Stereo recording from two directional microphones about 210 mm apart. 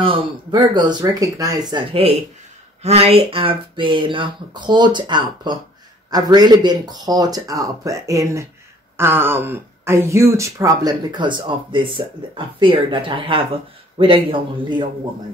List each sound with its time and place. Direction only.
0.0 s speech: 20° right (ahead or behind)